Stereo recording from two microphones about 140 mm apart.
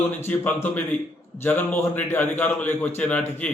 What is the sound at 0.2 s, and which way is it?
A man's voice, 15° left (ahead or behind).